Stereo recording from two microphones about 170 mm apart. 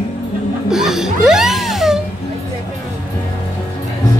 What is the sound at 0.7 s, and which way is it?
Music, 5° right (ahead or behind).